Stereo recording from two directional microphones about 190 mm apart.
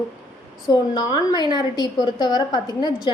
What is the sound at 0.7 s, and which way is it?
A woman's voice, 20° left (ahead or behind).